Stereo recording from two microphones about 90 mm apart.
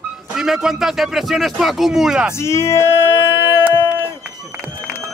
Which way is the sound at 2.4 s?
30° left (ahead or behind).